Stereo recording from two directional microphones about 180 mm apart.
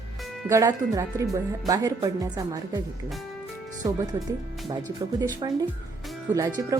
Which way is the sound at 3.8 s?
20° right (ahead or behind).